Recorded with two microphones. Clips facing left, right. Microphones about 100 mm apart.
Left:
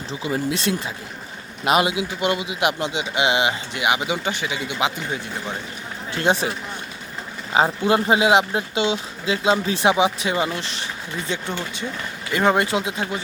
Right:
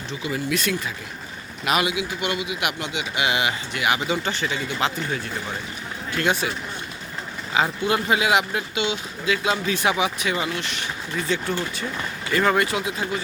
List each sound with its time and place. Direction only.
0.1 s speech: 30° left (ahead or behind); by 5.2 s 15° left (ahead or behind)
6.1 s speech: 30° left (ahead or behind)
7.5 s speech: 30° left (ahead or behind)